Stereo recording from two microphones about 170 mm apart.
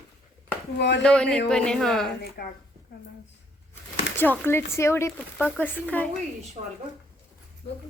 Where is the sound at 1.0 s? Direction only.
5° left (ahead or behind).